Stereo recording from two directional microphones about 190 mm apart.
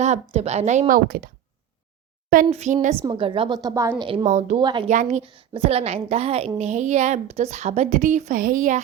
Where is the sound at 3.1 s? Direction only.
30° right (ahead or behind).